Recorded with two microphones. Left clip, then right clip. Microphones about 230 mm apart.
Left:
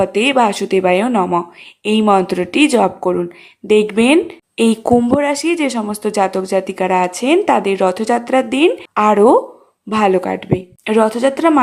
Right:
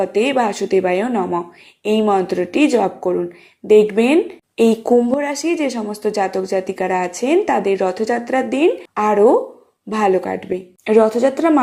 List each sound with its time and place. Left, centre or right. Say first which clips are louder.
0.0 s a woman's voice: left 3 dB; centre